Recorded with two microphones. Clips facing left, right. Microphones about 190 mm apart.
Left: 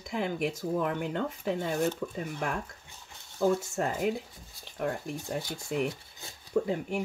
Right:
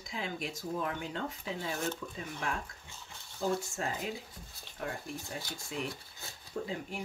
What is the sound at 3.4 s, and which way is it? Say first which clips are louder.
Speech: left 6 dB; 60° left (ahead or behind).